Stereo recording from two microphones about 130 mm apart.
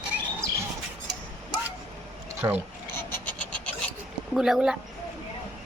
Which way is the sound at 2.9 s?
15° left (ahead or behind).